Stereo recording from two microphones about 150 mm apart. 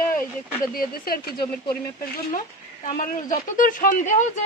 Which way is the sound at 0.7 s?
80° left.